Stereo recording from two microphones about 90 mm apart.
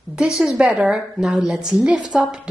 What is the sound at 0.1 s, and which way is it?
A woman's voice, 10° right (ahead or behind).